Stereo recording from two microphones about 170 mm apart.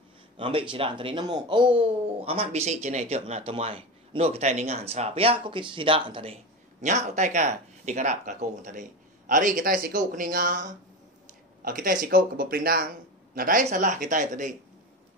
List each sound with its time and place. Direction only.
0.4 s speech: 30° right (ahead or behind)
6.8 s speech: 45° right (ahead or behind)